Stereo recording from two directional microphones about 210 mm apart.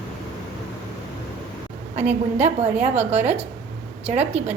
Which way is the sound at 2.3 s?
30° right (ahead or behind).